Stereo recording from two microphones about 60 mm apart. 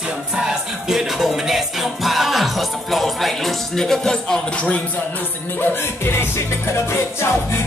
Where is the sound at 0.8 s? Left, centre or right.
Centre.